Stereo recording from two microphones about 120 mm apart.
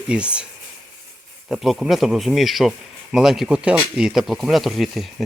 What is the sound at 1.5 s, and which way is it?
Speech, centre (ahead or behind).